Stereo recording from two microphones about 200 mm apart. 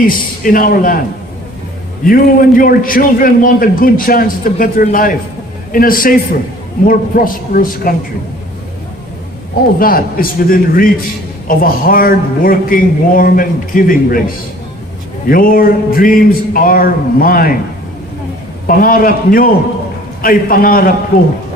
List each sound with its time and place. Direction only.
0.0 s a man's voice: 45° left (ahead or behind)
2.0 s a man's voice: 45° left (ahead or behind)
9.7 s a man's voice: 45° left (ahead or behind)
15.3 s a man's voice: 45° left (ahead or behind)
18.7 s a man's voice: 45° left (ahead or behind)